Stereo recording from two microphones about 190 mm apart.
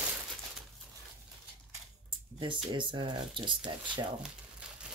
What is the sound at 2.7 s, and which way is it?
Speech, 25° right (ahead or behind).